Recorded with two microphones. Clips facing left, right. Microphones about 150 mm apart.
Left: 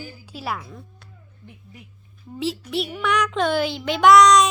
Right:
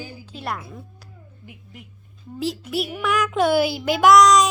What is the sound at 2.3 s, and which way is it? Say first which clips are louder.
A child's voice: even; centre (ahead or behind).